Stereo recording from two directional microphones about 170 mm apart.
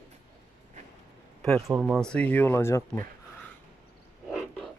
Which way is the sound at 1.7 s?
5° right (ahead or behind).